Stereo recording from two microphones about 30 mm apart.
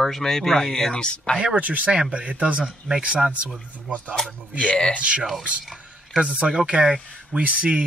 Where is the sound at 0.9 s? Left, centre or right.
Left.